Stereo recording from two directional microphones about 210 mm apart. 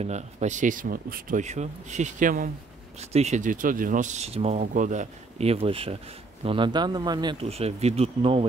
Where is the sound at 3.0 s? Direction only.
30° right (ahead or behind).